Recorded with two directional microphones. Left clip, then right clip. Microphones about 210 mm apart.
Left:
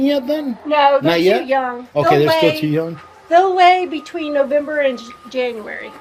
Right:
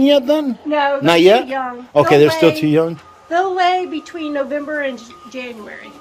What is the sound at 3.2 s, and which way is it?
A woman's voice, 50° left (ahead or behind).